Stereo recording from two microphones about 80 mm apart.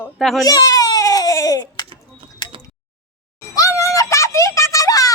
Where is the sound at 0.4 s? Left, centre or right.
Left.